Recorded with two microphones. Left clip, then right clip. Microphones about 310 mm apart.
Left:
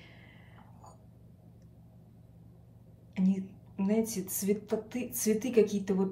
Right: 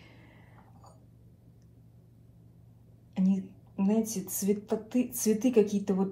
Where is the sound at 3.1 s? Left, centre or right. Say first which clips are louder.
Right 2 dB; centre.